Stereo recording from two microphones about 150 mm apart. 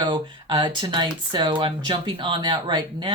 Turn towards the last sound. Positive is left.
turn(degrees=-30)  # may be behind; listen again after turning